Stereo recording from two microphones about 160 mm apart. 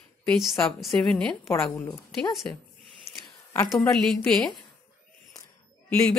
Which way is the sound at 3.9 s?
5° left (ahead or behind).